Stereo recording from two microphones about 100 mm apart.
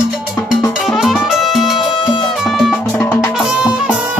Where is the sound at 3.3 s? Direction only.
5° right (ahead or behind).